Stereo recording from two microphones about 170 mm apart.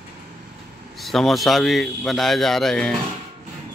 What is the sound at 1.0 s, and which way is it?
A man's voice, centre (ahead or behind).